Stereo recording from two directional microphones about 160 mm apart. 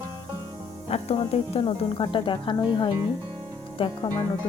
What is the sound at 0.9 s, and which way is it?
Speech, 40° left (ahead or behind).